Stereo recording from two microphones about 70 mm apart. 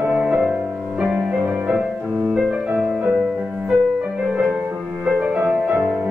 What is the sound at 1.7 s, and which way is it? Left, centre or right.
Music, right.